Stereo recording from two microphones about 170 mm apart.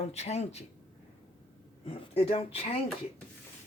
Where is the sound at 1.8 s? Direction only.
35° left (ahead or behind).